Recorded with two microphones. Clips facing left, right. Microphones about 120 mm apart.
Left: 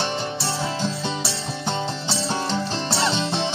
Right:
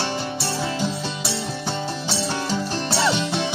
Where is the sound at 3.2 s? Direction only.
20° left (ahead or behind).